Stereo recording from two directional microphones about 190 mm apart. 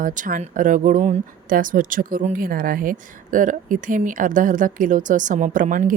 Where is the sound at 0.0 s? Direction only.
45° right (ahead or behind).